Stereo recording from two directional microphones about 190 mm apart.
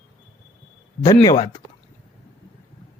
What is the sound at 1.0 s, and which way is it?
Speech, 20° left (ahead or behind).